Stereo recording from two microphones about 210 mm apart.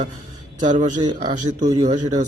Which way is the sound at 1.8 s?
30° right (ahead or behind).